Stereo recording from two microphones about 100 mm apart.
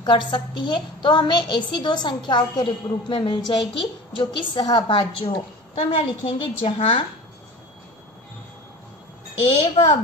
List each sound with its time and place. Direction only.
0.0 s a woman's voice: 50° left (ahead or behind); by 7.0 s 65° left (ahead or behind)
9.8 s a woman's voice: 70° left (ahead or behind)